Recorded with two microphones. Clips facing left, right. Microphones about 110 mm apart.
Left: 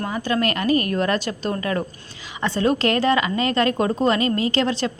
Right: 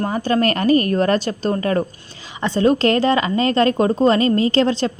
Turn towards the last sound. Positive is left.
turn(degrees=-30)  # may be behind; listen again after turning